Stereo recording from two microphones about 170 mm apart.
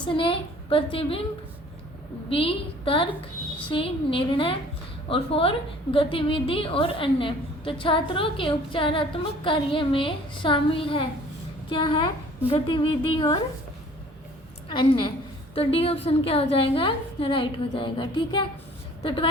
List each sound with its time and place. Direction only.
0.0 s a woman's voice: 30° left (ahead or behind)
2.3 s a woman's voice: 30° left (ahead or behind)
14.7 s a woman's voice: 30° left (ahead or behind)